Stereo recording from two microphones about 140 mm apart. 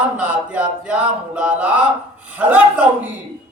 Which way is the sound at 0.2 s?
10° right (ahead or behind).